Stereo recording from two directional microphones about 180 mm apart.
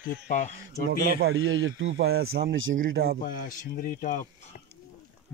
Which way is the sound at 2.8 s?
75° right (ahead or behind).